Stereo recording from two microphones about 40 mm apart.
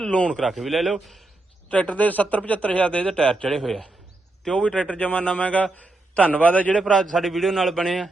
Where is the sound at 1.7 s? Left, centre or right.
Left.